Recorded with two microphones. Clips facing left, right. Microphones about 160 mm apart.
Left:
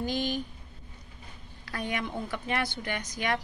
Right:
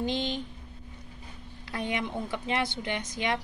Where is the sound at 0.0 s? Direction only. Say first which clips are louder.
Even; 25° right (ahead or behind).